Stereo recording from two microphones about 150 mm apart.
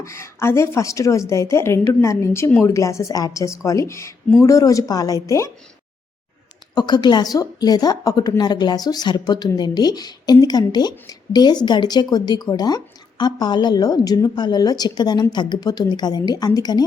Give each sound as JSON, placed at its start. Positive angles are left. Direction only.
{"t": 0.0, "sound": "a woman's voice", "side_deg": 20}
{"t": 6.7, "sound": "a woman's voice", "side_deg": 30}